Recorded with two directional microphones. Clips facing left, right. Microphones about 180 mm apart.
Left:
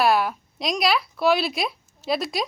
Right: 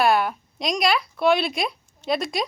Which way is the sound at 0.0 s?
Centre (ahead or behind).